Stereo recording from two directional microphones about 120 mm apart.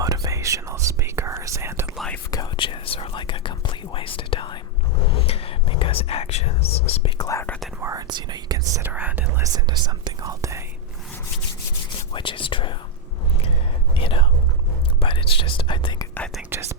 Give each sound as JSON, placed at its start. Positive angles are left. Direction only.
{"t": 0.0, "sound": "whispering", "side_deg": -30}
{"t": 2.0, "sound": "whispering", "side_deg": 10}
{"t": 2.6, "sound": "whispering", "side_deg": 45}
{"t": 7.2, "sound": "whispering", "side_deg": 25}
{"t": 7.8, "sound": "whispering", "side_deg": -25}
{"t": 8.0, "sound": "whispering", "side_deg": -35}
{"t": 8.8, "sound": "whispering", "side_deg": -15}
{"t": 9.4, "sound": "whispering", "side_deg": -35}
{"t": 11.9, "sound": "whispering", "side_deg": 45}
{"t": 13.9, "sound": "whispering", "side_deg": 45}
{"t": 16.5, "sound": "whispering", "side_deg": -20}